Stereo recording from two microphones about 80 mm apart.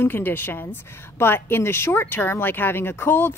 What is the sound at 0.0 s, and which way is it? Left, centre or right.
Speech, left.